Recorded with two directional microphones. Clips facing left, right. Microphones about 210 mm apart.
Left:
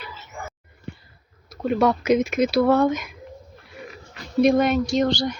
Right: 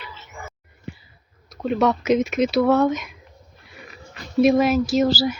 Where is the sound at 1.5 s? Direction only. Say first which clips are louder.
Even; centre (ahead or behind).